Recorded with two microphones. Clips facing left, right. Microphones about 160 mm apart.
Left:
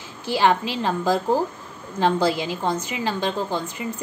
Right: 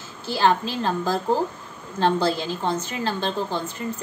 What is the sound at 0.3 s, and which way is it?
A woman's voice, 15° left (ahead or behind).